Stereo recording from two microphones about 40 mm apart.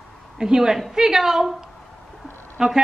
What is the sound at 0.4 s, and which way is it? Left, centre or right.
A woman's voice, centre.